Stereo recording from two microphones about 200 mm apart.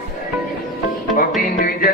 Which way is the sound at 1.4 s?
45° left (ahead or behind).